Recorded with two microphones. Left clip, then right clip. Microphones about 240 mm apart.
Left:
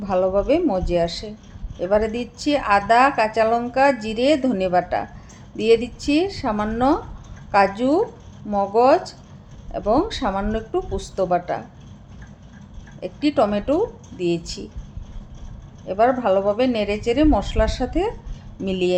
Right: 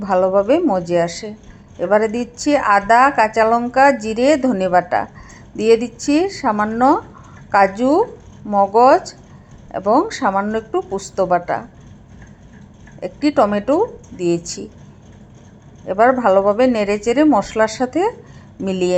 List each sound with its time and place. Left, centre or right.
0.0 s speech: centre
13.0 s speech: centre
15.9 s speech: centre